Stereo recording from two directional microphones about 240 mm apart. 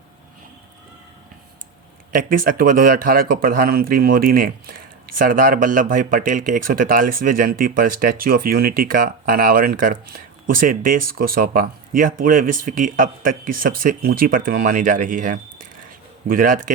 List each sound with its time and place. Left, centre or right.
2.1 s speech: right